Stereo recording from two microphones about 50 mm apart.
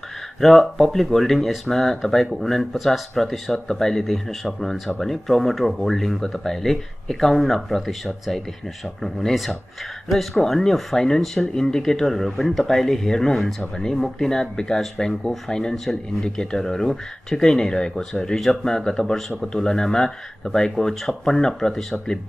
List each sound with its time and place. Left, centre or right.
0.4 s speech: centre